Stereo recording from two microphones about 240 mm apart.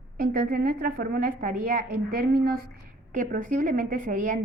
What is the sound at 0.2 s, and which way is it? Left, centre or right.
A woman's voice, right.